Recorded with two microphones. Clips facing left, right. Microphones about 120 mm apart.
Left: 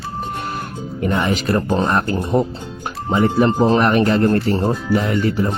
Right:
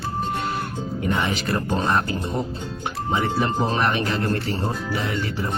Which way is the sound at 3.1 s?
45° left (ahead or behind).